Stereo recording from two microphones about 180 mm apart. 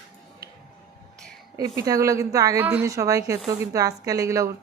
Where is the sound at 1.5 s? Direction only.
20° right (ahead or behind).